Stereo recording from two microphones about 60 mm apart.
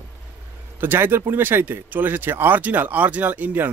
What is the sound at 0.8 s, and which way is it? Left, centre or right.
Speech, right.